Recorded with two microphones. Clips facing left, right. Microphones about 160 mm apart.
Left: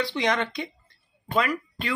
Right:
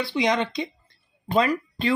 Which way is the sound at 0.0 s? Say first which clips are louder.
Right 2 dB; 10° right (ahead or behind).